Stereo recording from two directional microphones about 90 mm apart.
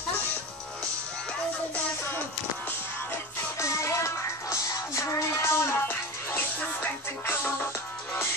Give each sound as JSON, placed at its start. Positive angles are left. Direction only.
{"t": 3.1, "sound": "music", "side_deg": 35}